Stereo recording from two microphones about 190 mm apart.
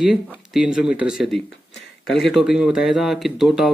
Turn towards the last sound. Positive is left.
turn(degrees=0)  # may be behind; listen again after turning